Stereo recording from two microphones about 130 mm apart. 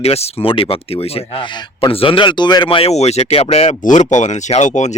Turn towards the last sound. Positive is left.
turn(degrees=65)  # may be behind; listen again after turning